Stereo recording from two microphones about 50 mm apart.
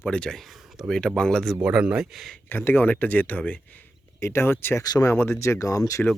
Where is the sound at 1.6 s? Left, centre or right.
Right.